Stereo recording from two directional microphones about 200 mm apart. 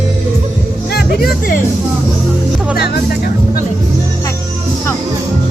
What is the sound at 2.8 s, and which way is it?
Speech, 50° left (ahead or behind).